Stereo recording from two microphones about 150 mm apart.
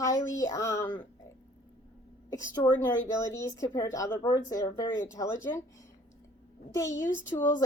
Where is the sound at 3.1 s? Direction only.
20° left (ahead or behind).